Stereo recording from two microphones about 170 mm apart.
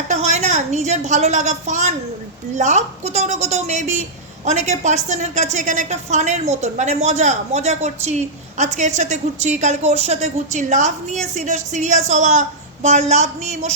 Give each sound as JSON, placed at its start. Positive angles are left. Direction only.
{"t": 0.1, "sound": "a woman's voice", "side_deg": -45}